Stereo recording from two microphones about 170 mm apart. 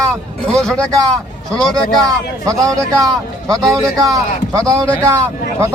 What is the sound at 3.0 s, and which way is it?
A man's voice, 20° right (ahead or behind).